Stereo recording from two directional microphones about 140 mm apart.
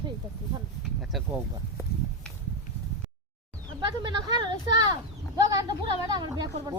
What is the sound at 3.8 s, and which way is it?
Speech, 30° right (ahead or behind).